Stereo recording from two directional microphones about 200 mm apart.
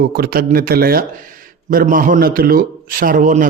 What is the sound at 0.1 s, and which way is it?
A man's voice, 50° right (ahead or behind).